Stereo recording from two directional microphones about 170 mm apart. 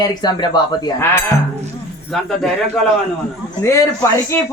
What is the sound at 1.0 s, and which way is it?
Speech, 15° left (ahead or behind).